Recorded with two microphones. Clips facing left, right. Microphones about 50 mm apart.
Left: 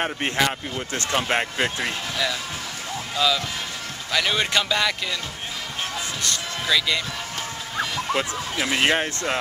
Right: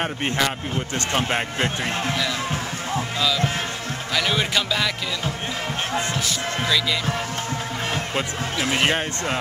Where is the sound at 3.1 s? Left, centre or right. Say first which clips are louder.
Left 2 dB; centre.